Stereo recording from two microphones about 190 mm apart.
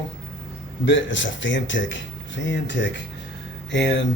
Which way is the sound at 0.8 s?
75° left (ahead or behind).